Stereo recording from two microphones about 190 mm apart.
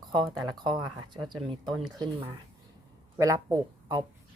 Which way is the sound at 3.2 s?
15° right (ahead or behind).